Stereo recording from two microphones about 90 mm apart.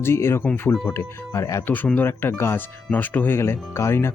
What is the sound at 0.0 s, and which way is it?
Speech, 30° left (ahead or behind).